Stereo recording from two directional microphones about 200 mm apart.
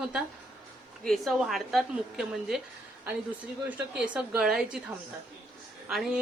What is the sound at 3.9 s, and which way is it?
Speech, 5° right (ahead or behind).